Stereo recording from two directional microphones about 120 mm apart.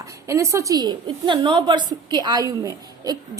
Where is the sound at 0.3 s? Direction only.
25° right (ahead or behind).